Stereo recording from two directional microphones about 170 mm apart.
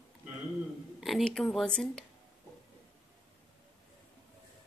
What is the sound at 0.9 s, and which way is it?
Speech, centre (ahead or behind).